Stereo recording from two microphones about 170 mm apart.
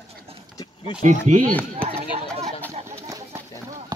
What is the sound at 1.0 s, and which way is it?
Speech, 45° right (ahead or behind).